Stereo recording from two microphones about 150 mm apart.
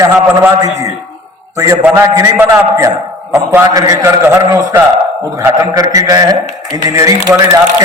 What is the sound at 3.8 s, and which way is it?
A man's voice, 25° right (ahead or behind).